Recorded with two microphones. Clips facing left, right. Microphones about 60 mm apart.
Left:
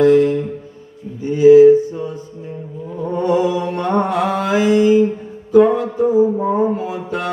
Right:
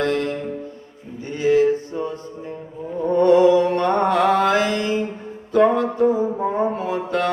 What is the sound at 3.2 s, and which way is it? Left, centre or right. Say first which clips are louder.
Music: right 4 dB; centre.